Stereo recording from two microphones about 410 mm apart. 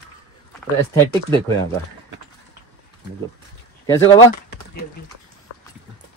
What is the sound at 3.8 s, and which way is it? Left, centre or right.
Speech, centre.